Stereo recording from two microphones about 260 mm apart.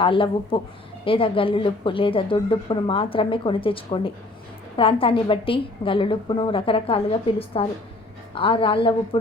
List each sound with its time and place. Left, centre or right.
0.0 s speech: centre